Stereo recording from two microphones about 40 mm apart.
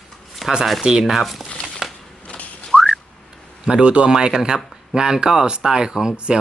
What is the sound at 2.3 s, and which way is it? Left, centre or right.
Whistling, left.